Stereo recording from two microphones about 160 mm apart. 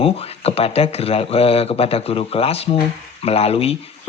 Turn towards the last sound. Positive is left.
turn(degrees=40)  # may be behind; listen again after turning